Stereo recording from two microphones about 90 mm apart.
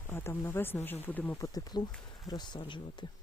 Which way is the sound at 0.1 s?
25° left (ahead or behind).